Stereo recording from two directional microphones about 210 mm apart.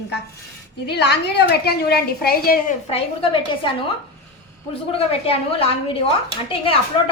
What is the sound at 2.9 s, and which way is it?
Speech, 25° left (ahead or behind).